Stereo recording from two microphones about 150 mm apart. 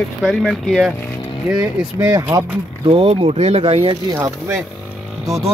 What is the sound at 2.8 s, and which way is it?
Speech, 40° right (ahead or behind).